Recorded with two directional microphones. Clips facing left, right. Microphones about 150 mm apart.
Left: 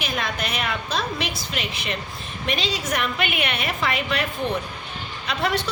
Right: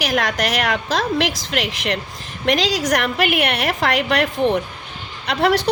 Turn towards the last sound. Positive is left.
turn(degrees=-70)  # may be behind; listen again after turning